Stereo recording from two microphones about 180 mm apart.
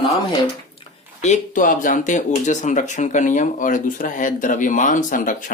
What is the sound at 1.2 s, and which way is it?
Speech, 45° left (ahead or behind).